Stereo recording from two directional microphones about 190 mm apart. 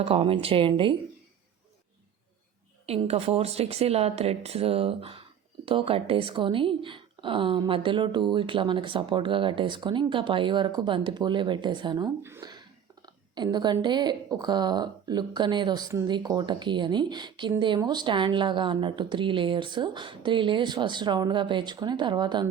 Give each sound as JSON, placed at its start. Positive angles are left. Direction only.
{"t": 0.0, "sound": "a woman's voice", "side_deg": -30}
{"t": 2.8, "sound": "a woman's voice", "side_deg": -35}